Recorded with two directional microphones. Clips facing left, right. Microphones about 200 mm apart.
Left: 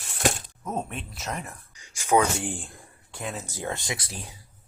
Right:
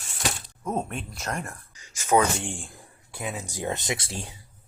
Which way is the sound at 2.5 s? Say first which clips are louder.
Left 2 dB; centre (ahead or behind).